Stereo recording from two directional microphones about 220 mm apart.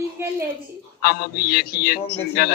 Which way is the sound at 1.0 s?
45° left (ahead or behind).